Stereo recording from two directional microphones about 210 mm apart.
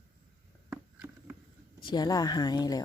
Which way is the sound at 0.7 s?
10° right (ahead or behind).